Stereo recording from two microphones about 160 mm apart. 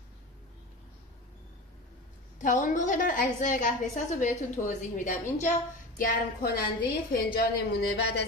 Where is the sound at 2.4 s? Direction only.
55° left (ahead or behind).